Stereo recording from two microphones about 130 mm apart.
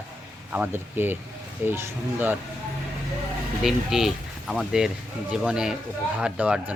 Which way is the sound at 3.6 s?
Centre (ahead or behind).